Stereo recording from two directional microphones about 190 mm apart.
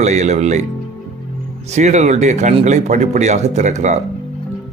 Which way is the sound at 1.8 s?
40° right (ahead or behind).